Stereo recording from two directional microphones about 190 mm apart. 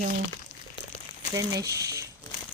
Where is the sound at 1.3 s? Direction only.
20° right (ahead or behind).